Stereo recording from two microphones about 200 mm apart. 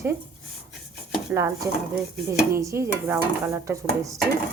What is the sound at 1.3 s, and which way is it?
Dishes, 15° right (ahead or behind).